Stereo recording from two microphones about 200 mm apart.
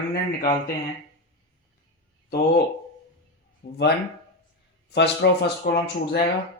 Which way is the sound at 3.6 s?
60° left (ahead or behind).